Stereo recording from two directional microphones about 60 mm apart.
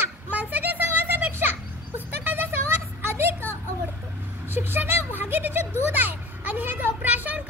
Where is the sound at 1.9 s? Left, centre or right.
Right.